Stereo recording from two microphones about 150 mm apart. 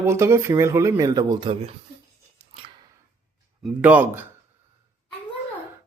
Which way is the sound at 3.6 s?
10° right (ahead or behind).